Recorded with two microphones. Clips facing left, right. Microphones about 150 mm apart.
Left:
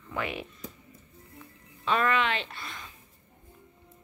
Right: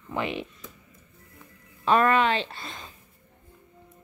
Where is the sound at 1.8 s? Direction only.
45° right (ahead or behind).